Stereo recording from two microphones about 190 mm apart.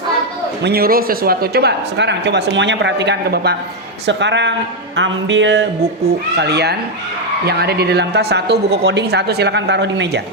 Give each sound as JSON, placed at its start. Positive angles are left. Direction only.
{"t": 0.6, "sound": "speech", "side_deg": -55}
{"t": 4.0, "sound": "music", "side_deg": -65}
{"t": 6.1, "sound": "speech", "side_deg": -60}